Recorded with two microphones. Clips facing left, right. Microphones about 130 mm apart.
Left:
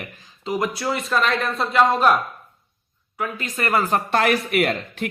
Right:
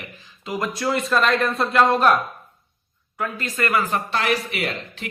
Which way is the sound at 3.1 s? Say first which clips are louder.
Even; 10° left (ahead or behind).